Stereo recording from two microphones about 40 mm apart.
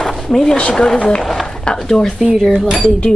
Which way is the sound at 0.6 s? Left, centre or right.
Left.